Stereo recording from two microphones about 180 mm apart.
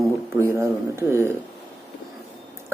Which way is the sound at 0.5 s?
15° right (ahead or behind).